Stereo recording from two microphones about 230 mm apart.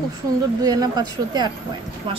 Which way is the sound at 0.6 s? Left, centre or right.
Centre.